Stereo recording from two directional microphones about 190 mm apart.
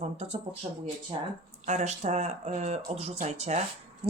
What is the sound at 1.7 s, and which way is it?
Speech, 40° right (ahead or behind).